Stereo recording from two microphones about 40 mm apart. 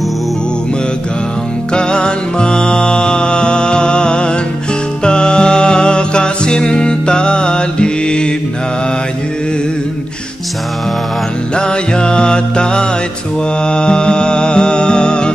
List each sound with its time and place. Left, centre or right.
1.7 s music: left
11.5 s music: left